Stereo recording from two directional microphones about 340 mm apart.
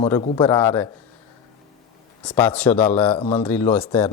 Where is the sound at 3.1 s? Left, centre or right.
Centre.